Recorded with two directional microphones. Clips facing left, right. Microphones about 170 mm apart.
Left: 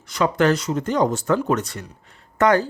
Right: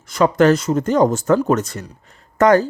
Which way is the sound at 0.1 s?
45° right (ahead or behind).